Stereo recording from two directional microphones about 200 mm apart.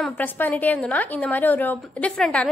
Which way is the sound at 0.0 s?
10° left (ahead or behind).